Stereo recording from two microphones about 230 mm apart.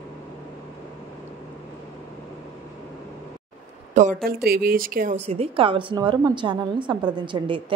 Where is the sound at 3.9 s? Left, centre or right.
Right.